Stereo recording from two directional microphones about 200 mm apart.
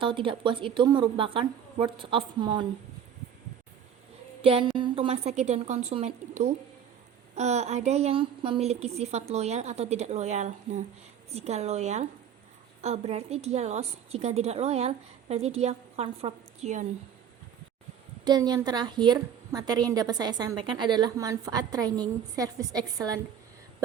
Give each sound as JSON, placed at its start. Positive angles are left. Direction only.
{"t": 0.0, "sound": "a woman's voice", "side_deg": -25}
{"t": 4.4, "sound": "a woman's voice", "side_deg": -30}
{"t": 7.3, "sound": "a woman's voice", "side_deg": -35}
{"t": 18.3, "sound": "a woman's voice", "side_deg": -20}